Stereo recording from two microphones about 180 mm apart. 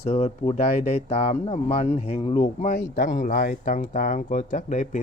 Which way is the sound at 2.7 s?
50° left (ahead or behind).